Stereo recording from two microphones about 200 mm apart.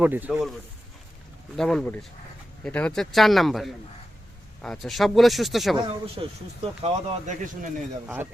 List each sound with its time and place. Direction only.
0.0 s a man's voice: 10° right (ahead or behind)
1.5 s speech: centre (ahead or behind)
5.7 s speech: 25° right (ahead or behind)
8.0 s a man's voice: 10° right (ahead or behind)